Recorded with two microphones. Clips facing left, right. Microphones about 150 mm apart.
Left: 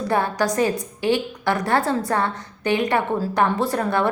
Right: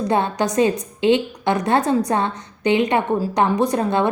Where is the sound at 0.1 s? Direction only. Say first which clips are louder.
Even; 20° right (ahead or behind).